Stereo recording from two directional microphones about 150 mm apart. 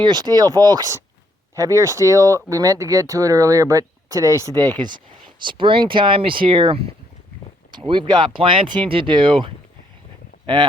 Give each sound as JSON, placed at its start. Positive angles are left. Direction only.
{"t": 0.0, "sound": "speech", "side_deg": -30}